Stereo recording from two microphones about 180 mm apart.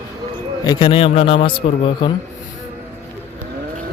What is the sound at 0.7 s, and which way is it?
A man's voice, 30° left (ahead or behind).